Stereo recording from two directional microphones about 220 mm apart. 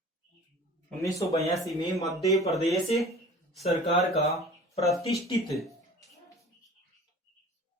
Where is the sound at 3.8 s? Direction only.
30° left (ahead or behind).